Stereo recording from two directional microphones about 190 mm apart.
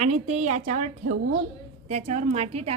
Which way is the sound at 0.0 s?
35° right (ahead or behind).